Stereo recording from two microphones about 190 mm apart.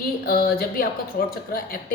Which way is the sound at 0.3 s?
50° left (ahead or behind).